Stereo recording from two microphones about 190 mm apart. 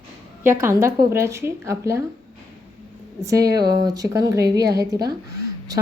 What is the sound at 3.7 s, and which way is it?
Speech, 20° right (ahead or behind).